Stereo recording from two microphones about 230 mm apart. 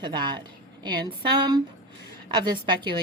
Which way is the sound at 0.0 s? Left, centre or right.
Centre.